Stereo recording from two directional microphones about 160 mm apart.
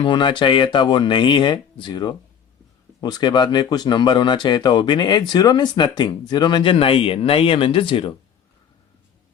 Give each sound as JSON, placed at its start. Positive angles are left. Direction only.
{"t": 0.0, "sound": "speech", "side_deg": 30}